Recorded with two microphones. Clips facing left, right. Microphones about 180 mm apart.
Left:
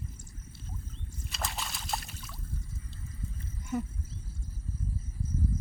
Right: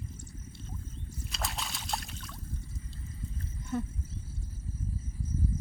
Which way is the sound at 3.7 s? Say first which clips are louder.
Left 1 dB; 10° left (ahead or behind).